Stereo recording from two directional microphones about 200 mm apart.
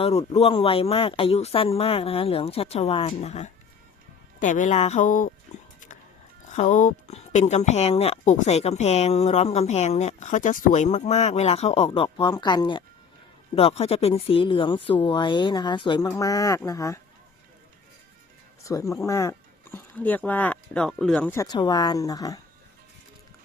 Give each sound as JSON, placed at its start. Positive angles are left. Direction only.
{"t": 0.0, "sound": "speech", "side_deg": 30}
{"t": 6.5, "sound": "speech", "side_deg": 35}
{"t": 18.6, "sound": "speech", "side_deg": 15}